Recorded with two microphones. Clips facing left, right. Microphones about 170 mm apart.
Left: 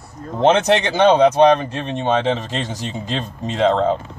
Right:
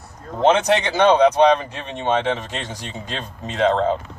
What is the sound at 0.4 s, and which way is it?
Speech, 25° left (ahead or behind).